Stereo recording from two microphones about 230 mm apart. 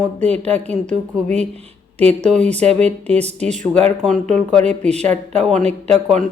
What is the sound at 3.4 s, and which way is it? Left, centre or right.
Speech, right.